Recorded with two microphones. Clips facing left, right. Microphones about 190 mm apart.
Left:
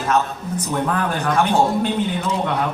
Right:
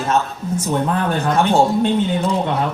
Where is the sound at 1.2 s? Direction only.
25° right (ahead or behind).